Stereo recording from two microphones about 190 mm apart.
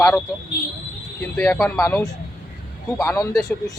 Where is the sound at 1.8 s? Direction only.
15° left (ahead or behind).